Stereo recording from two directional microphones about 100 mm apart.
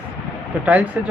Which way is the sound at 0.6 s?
15° right (ahead or behind).